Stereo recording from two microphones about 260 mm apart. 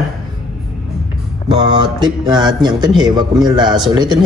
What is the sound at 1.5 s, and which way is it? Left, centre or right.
Speech, centre.